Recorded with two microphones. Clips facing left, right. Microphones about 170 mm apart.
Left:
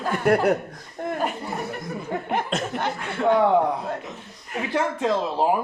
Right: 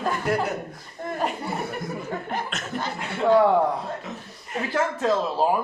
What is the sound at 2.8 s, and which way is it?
Chuckle, 60° left (ahead or behind).